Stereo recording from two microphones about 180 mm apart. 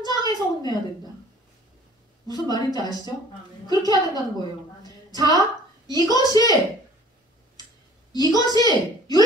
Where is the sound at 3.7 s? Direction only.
20° right (ahead or behind).